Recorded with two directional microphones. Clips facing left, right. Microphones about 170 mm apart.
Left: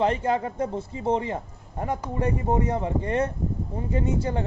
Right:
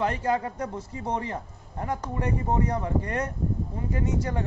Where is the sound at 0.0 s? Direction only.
25° left (ahead or behind).